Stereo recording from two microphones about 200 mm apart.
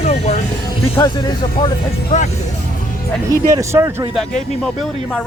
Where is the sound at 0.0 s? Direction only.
35° left (ahead or behind).